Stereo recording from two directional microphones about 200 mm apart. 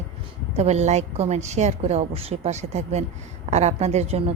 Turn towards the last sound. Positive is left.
turn(degrees=-30)  # may be behind; listen again after turning